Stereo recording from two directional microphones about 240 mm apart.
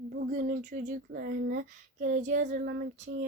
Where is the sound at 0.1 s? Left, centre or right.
Right.